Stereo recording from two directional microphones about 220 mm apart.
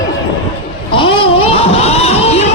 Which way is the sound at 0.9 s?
25° left (ahead or behind).